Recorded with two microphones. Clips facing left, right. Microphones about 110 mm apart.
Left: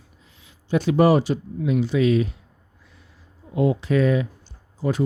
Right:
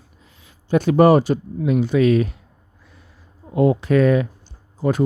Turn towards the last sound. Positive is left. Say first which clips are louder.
# right 4 dB
turn(degrees=-55)  # may be behind; listen again after turning